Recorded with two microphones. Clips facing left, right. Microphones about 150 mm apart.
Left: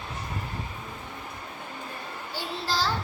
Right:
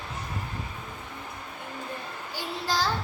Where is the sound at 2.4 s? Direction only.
15° right (ahead or behind).